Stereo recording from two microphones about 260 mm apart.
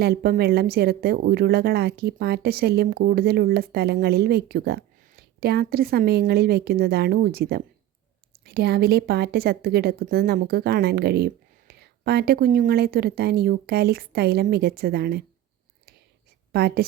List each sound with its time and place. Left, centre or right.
0.0 s a woman's voice: right
16.5 s a woman's voice: right